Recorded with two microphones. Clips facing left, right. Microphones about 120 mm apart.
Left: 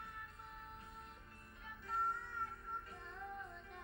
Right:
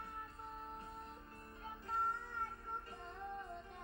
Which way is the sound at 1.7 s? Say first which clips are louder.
Right 1 dB; 35° right (ahead or behind).